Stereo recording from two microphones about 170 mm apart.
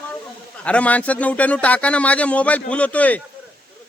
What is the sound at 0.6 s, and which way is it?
Speech, 10° left (ahead or behind).